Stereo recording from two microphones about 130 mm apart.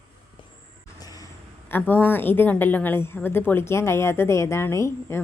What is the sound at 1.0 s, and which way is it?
Vehicle, 30° left (ahead or behind).